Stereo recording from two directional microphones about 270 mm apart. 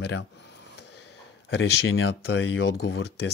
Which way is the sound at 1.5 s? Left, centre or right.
Left.